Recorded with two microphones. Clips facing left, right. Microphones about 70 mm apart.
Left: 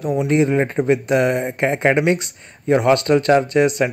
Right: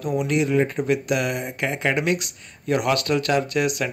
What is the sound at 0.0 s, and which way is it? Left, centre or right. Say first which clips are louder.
Speech: left 5 dB; left.